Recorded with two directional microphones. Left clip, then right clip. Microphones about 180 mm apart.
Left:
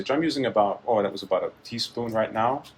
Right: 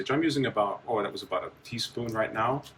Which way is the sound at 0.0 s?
35° left (ahead or behind).